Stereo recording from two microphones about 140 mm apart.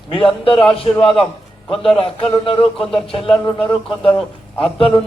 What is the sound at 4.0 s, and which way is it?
A man's voice, 40° left (ahead or behind).